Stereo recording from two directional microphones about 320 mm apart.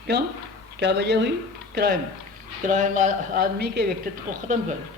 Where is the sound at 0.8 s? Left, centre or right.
Right.